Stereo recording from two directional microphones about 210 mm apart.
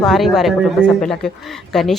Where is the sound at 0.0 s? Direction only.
Centre (ahead or behind).